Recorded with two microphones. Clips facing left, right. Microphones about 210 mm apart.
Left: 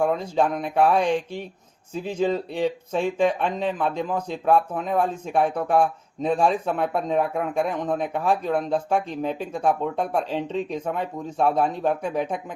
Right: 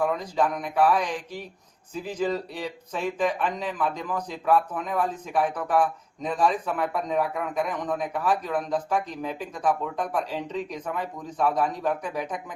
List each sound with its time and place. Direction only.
0.0 s speech: 25° left (ahead or behind)